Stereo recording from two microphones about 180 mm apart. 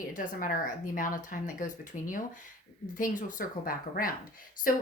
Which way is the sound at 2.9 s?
50° left (ahead or behind).